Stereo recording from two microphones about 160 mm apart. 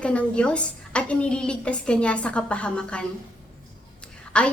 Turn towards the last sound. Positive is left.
turn(degrees=5)  # may be behind; listen again after turning